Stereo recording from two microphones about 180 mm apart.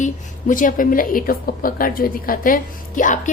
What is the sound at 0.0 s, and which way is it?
A woman's voice, 45° left (ahead or behind).